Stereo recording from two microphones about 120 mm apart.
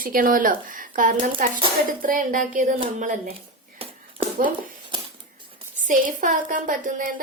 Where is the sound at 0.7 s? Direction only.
90° right.